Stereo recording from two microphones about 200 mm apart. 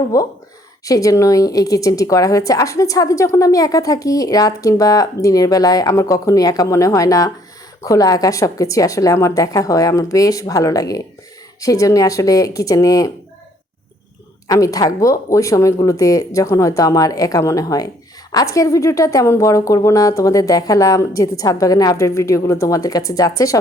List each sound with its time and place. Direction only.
0.1 s a woman's voice: 15° left (ahead or behind)
14.4 s a woman's voice: 15° left (ahead or behind)